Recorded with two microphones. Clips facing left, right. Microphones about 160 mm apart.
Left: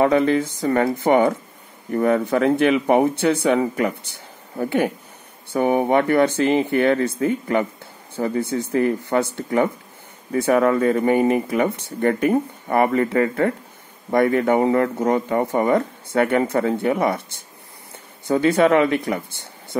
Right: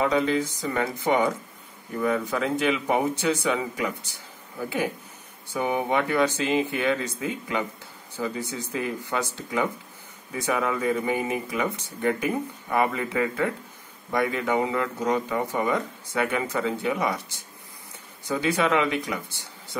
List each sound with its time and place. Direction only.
0.0 s speech: 55° left (ahead or behind)
18.2 s speech: 55° left (ahead or behind)